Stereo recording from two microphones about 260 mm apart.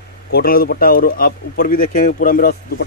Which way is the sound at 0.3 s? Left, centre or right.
Left.